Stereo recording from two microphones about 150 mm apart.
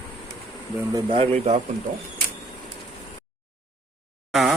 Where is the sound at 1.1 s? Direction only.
45° right (ahead or behind).